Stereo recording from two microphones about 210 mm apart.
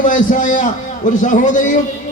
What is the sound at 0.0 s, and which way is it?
A man's voice, 40° left (ahead or behind).